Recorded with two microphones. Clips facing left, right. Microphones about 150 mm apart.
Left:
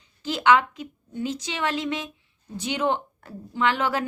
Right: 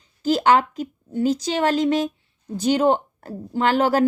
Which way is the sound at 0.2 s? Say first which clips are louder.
Right 3 dB; 40° right (ahead or behind).